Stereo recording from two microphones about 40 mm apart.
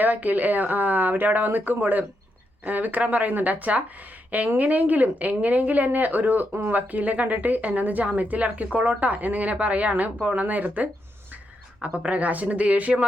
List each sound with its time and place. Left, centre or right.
0.0 s speech: right
6.5 s speech: right